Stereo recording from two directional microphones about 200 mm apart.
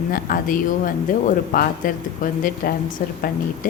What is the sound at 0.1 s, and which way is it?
A woman's voice, 45° left (ahead or behind).